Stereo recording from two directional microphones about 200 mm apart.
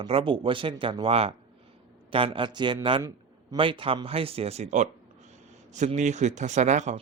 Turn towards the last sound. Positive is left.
turn(degrees=-35)  # may be behind; listen again after turning